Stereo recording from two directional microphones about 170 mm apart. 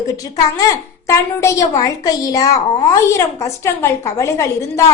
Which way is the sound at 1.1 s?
15° left (ahead or behind).